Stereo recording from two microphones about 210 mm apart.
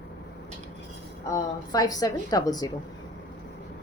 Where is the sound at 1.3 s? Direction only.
15° left (ahead or behind).